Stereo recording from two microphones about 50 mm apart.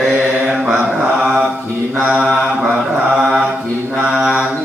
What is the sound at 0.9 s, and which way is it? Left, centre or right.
Mantra, centre.